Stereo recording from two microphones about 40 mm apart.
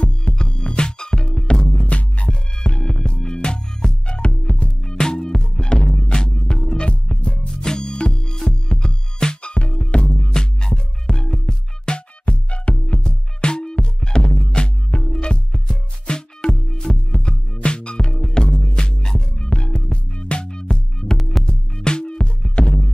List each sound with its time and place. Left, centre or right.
0.0 s music: left
1.8 s music: left
4.9 s music: centre
7.4 s music: centre
19.3 s music: left